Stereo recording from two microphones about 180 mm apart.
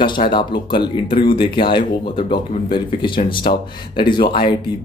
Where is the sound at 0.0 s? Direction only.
25° left (ahead or behind).